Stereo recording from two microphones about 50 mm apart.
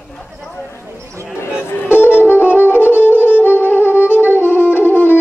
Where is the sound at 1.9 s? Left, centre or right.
Left.